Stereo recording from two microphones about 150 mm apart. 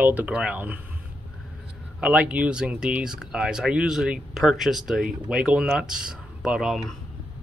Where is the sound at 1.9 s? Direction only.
5° right (ahead or behind).